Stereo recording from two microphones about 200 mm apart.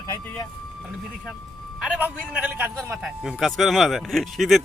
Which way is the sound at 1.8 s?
5° right (ahead or behind).